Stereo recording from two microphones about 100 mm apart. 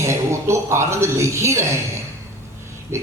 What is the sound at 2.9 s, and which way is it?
Speech, 30° right (ahead or behind).